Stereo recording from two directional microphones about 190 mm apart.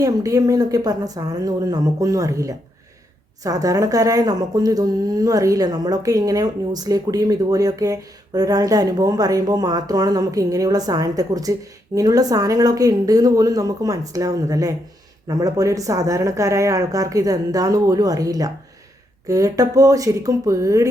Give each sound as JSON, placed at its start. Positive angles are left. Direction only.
{"t": 0.0, "sound": "speech", "side_deg": -20}